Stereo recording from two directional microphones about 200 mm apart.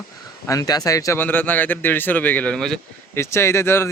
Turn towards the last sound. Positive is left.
turn(degrees=10)  # may be behind; listen again after turning